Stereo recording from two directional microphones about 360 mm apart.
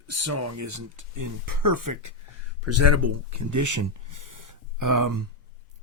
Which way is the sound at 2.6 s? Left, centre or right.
Right.